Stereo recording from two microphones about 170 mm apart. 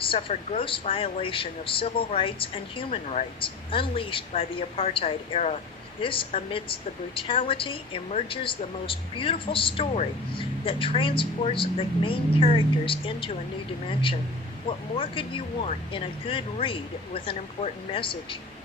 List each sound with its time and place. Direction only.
0.0 s a woman's voice: 30° left (ahead or behind)
14.9 s a woman's voice: 30° left (ahead or behind)